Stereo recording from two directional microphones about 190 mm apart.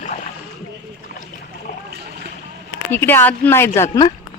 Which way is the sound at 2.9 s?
10° left (ahead or behind).